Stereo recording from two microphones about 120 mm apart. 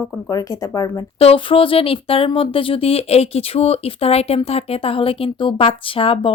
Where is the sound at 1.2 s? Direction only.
50° left (ahead or behind).